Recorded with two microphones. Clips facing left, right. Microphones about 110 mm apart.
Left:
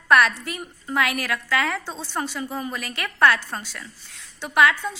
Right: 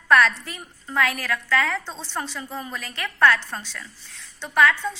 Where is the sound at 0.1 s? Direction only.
10° left (ahead or behind).